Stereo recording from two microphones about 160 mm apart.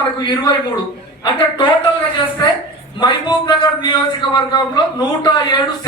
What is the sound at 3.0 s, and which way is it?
A man's voice, 30° left (ahead or behind).